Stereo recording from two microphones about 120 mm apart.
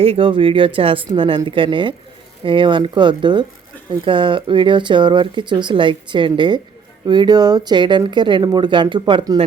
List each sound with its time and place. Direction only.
0.0 s speech: 50° right (ahead or behind)